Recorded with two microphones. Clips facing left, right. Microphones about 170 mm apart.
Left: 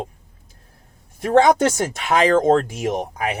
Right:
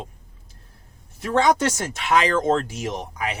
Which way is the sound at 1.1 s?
50° left (ahead or behind).